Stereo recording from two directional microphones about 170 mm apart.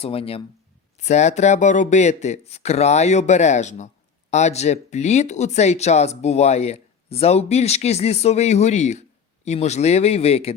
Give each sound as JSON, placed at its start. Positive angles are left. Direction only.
{"t": 0.0, "sound": "speech", "side_deg": 35}